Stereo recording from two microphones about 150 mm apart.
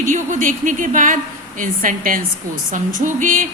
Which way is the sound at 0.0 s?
60° right (ahead or behind).